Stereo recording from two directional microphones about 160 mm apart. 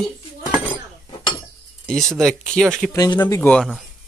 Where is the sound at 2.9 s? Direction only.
25° left (ahead or behind).